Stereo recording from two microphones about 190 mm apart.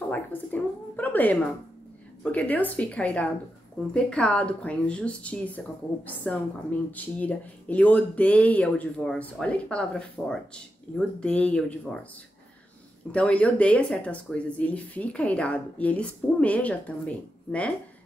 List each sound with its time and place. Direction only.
0.1 s a sound: 10° left (ahead or behind)
2.3 s a woman's voice: 10° left (ahead or behind)
13.1 s speech: 5° left (ahead or behind)